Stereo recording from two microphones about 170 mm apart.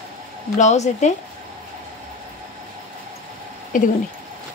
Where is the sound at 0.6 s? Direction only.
45° left (ahead or behind).